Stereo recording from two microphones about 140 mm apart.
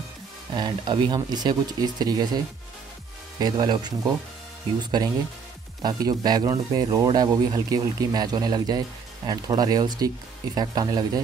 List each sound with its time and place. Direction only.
0.6 s speech: 35° right (ahead or behind)
5.8 s speech: 30° right (ahead or behind)